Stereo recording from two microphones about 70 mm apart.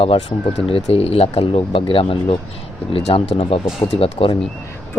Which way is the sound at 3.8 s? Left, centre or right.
Left.